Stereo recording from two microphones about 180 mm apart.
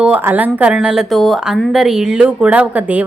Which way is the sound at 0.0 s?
10° right (ahead or behind).